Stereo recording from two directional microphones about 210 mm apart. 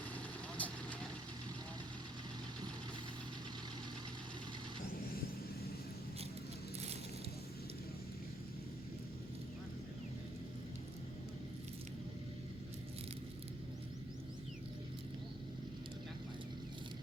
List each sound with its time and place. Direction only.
0.5 s vehicle: 5° left (ahead or behind)